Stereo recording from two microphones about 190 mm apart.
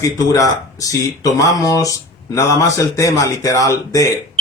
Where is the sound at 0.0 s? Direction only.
20° left (ahead or behind).